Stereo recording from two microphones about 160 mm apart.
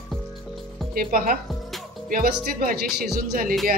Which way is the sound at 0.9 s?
65° right (ahead or behind).